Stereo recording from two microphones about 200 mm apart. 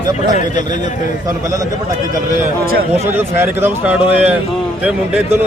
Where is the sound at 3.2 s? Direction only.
10° right (ahead or behind).